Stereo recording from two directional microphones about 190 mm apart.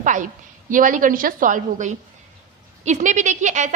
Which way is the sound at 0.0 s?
40° right (ahead or behind).